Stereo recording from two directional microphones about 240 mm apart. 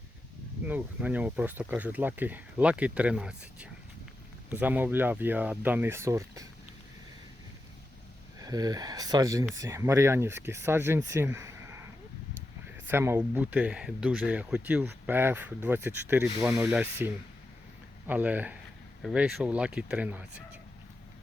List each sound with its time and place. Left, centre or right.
0.7 s speech: centre
8.4 s speech: centre
12.9 s speech: centre